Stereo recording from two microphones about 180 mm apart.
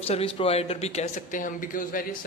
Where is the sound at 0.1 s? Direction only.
30° left (ahead or behind).